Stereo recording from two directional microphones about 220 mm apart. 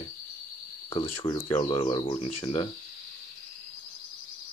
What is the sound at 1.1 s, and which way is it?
Speech, 25° left (ahead or behind).